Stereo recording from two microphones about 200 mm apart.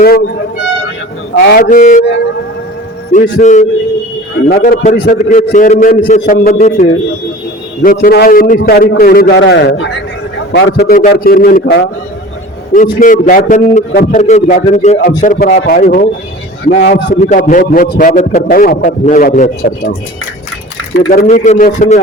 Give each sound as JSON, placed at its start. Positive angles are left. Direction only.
{"t": 1.4, "sound": "a man's voice", "side_deg": 50}
{"t": 3.1, "sound": "a man's voice", "side_deg": 40}
{"t": 4.4, "sound": "a man's voice", "side_deg": 50}
{"t": 11.6, "sound": "a man's voice", "side_deg": 70}
{"t": 12.7, "sound": "a man's voice", "side_deg": 40}
{"t": 15.5, "sound": "a man's voice", "side_deg": 50}
{"t": 21.2, "sound": "a man's voice", "side_deg": 35}